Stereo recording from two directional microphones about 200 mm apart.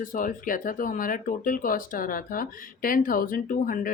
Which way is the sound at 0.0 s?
45° left (ahead or behind).